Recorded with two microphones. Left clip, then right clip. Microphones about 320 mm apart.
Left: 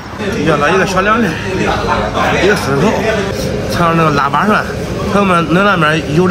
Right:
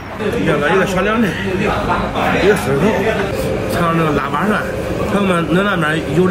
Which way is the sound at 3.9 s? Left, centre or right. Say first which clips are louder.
Left 7 dB; left.